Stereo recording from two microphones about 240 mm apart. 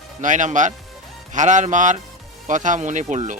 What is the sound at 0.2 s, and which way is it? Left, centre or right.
Speech, right.